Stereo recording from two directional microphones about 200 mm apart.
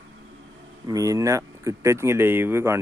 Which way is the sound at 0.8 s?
15° right (ahead or behind).